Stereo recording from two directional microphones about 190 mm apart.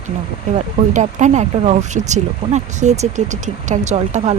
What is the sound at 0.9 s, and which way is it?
Speech, 40° right (ahead or behind).